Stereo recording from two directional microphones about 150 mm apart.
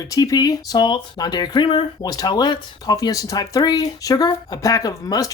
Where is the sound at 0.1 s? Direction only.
25° left (ahead or behind).